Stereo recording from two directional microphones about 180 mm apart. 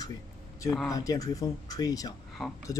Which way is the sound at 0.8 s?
20° left (ahead or behind).